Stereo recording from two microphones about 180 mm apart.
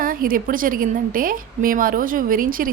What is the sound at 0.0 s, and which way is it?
Speech, 50° right (ahead or behind).